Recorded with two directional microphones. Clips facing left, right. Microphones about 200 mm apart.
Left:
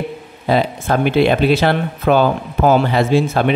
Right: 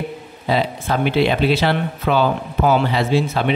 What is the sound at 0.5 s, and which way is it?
Speech, 50° left (ahead or behind).